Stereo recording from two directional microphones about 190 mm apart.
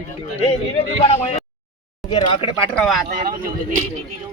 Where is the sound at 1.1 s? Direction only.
35° left (ahead or behind).